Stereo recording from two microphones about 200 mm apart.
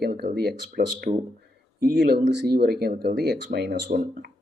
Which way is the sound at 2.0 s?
55° right (ahead or behind).